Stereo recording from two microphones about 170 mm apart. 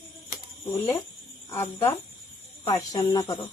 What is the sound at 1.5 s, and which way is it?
Speech, 20° left (ahead or behind).